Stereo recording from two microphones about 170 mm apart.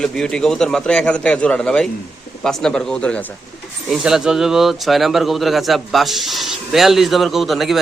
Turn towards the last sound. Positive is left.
turn(degrees=0)  # may be behind; listen again after turning